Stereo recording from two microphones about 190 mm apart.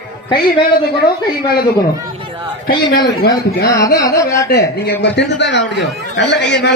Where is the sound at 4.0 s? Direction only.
15° left (ahead or behind).